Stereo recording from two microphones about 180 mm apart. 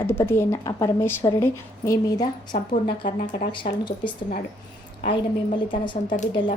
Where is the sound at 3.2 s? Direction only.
45° left (ahead or behind).